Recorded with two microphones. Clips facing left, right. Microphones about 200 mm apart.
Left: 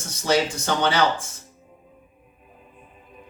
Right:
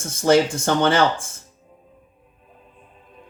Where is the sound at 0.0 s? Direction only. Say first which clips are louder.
Right 5 dB; 50° right (ahead or behind).